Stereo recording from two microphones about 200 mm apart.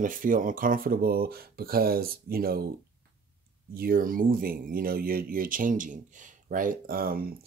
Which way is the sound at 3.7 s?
45° right (ahead or behind).